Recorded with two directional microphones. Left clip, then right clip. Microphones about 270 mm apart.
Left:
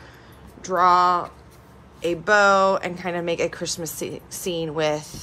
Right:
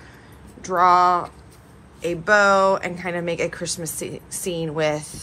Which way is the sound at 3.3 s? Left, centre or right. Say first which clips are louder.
Even; left.